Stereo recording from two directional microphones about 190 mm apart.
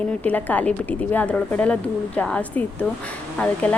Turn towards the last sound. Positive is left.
turn(degrees=5)  # may be behind; listen again after turning